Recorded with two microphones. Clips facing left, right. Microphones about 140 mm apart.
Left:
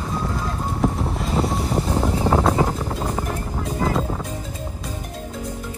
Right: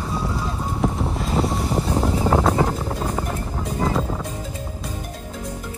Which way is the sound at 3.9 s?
Centre (ahead or behind).